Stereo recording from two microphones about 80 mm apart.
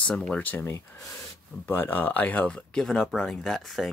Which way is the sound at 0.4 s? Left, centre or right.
Left.